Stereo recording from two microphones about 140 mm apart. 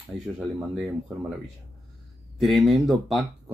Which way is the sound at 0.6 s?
5° right (ahead or behind).